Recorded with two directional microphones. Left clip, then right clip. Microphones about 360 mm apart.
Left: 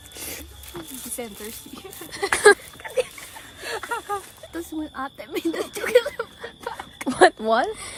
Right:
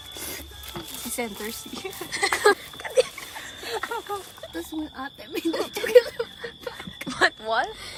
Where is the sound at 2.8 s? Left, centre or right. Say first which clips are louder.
Right 5 dB; centre.